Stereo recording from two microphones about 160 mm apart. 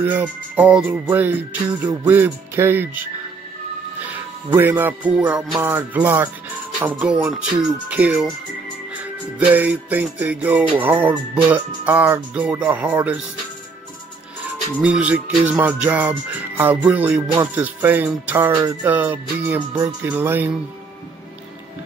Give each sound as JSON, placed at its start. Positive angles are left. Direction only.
{"t": 0.0, "sound": "music", "side_deg": -10}
{"t": 4.0, "sound": "music", "side_deg": -10}
{"t": 14.8, "sound": "music", "side_deg": -10}